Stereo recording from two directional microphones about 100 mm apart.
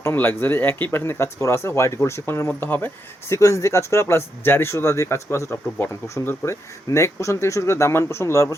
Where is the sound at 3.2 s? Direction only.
30° left (ahead or behind).